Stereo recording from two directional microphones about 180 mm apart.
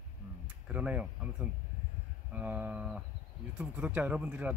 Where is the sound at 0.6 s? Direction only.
5° right (ahead or behind).